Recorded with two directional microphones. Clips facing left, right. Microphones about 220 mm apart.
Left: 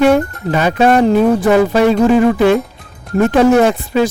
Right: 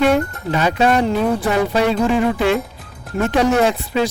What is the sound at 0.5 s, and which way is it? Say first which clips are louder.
Speech: left 5 dB; 55° left (ahead or behind).